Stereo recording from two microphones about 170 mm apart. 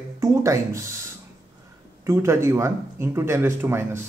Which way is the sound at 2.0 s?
15° right (ahead or behind).